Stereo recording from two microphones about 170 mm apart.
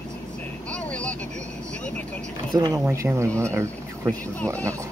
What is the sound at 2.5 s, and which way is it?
Speech, 25° right (ahead or behind).